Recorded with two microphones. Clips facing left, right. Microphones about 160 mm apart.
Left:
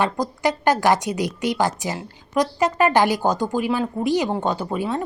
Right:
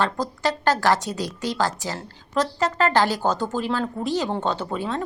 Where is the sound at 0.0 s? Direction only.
15° left (ahead or behind).